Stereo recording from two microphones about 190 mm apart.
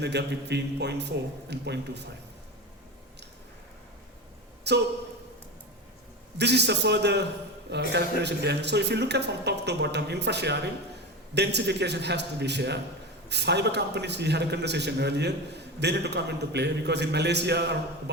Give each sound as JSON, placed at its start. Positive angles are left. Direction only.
{"t": 0.0, "sound": "a man's voice", "side_deg": -60}
{"t": 4.7, "sound": "a man's voice", "side_deg": -65}
{"t": 6.3, "sound": "a man's voice", "side_deg": -60}